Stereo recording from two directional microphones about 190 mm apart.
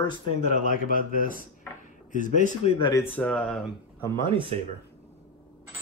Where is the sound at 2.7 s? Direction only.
25° left (ahead or behind).